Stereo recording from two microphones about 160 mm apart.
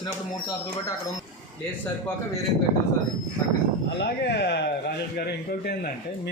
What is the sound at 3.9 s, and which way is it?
A man's voice, 90° left.